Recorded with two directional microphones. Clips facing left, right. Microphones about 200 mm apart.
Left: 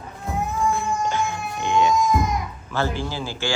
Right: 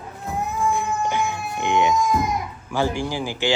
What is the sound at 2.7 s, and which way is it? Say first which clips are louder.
Speech: right 2 dB; 15° right (ahead or behind).